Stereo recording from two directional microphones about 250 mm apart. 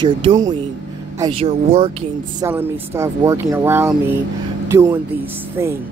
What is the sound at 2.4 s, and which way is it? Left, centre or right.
Speech, centre.